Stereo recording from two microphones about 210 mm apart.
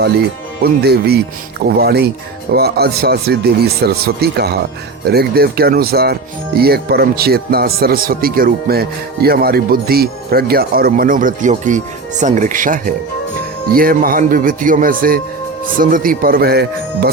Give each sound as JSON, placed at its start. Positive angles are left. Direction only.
{"t": 0.6, "sound": "speech", "side_deg": -50}